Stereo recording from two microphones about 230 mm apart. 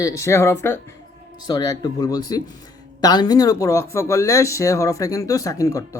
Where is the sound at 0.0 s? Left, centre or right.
Centre.